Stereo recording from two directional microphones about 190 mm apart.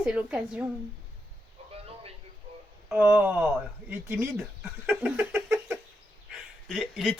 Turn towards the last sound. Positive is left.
turn(degrees=0)  # may be behind; listen again after turning